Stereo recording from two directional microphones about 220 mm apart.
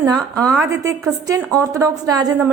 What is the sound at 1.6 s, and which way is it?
Speech, 15° right (ahead or behind).